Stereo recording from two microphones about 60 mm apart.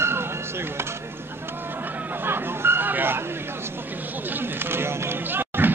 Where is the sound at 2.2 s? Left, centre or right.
Right.